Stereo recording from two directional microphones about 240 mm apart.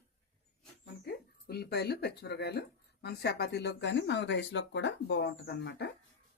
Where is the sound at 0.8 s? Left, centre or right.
Left.